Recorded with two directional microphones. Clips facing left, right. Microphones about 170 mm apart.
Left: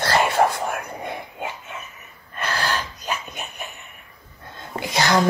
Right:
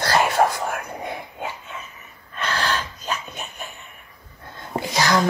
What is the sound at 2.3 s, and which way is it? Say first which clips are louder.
Gasp: even; 10° left (ahead or behind).